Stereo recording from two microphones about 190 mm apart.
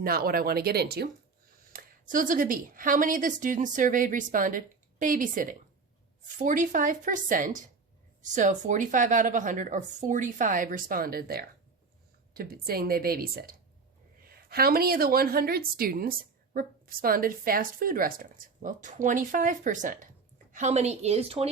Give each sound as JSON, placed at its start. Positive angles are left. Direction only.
{"t": 0.0, "sound": "a woman's voice", "side_deg": -50}
{"t": 1.7, "sound": "a woman's voice", "side_deg": -45}